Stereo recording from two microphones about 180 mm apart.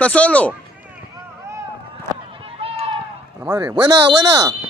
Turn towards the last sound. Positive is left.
turn(degrees=-20)  # may be behind; listen again after turning